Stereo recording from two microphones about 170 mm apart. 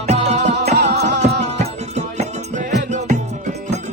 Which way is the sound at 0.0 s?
40° right (ahead or behind).